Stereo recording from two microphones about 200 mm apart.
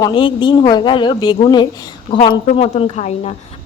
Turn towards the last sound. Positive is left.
turn(degrees=30)  # may be behind; listen again after turning